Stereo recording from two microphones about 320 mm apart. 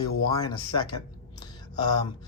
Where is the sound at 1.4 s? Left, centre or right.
Centre.